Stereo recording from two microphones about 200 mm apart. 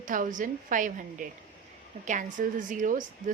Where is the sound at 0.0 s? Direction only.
40° right (ahead or behind).